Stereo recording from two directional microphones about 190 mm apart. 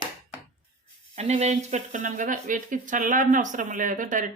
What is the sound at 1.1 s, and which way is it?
Speech, 35° right (ahead or behind).